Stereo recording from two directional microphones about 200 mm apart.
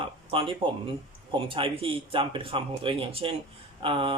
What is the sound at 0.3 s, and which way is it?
Speech, 25° right (ahead or behind).